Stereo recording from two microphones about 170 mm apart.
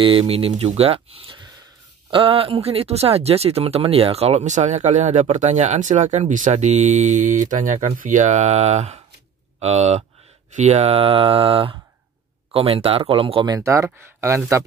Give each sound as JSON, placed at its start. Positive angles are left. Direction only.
{"t": 0.0, "sound": "speech", "side_deg": -30}